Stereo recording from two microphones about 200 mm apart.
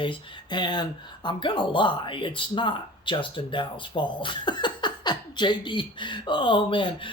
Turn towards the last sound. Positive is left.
turn(degrees=25)  # may be behind; listen again after turning